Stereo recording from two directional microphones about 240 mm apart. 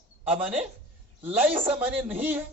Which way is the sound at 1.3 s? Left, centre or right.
Centre.